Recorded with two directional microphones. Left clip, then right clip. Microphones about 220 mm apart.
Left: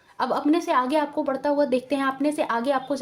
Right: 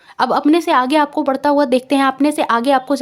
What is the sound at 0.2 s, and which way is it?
Speech, 45° right (ahead or behind).